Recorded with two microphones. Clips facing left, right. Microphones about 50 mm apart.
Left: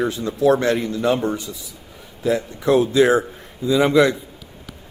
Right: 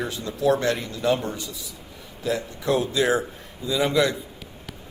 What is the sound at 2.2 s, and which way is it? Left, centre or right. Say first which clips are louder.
A man's voice: left 6 dB; left.